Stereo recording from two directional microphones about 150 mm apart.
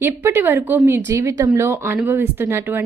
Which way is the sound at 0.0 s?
15° right (ahead or behind).